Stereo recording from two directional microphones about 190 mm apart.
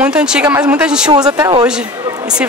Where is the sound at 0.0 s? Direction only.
5° right (ahead or behind).